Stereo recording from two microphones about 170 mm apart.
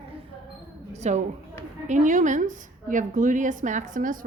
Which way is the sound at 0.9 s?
40° right (ahead or behind).